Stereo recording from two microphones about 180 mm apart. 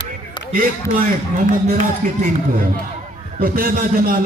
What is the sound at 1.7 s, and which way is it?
A man's voice, 50° right (ahead or behind).